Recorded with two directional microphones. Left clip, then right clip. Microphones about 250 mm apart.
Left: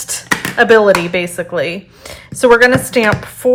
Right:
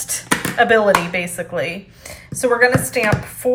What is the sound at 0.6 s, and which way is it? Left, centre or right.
A woman's voice, centre.